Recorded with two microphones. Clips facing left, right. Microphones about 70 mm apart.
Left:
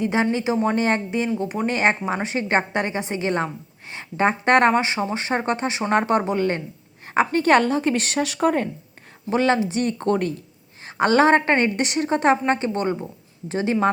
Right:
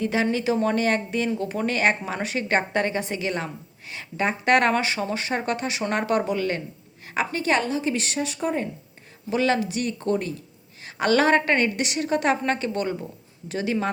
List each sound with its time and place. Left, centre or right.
0.0 s a woman's voice: left
9.3 s a woman's voice: left
10.8 s a woman's voice: left